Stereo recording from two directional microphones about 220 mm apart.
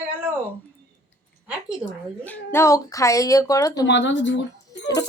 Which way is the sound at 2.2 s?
10° left (ahead or behind).